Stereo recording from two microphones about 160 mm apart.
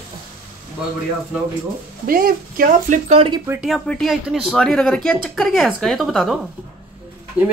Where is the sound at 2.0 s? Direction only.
65° right (ahead or behind); by 3.4 s 35° right (ahead or behind).